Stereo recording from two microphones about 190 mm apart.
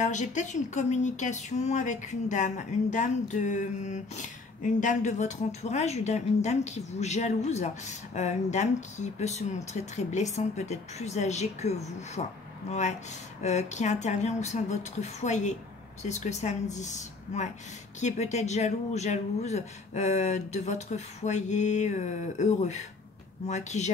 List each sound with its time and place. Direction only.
0.0 s speech: 40° left (ahead or behind)